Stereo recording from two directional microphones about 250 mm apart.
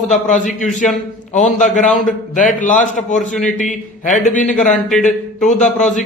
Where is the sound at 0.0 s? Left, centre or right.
Left.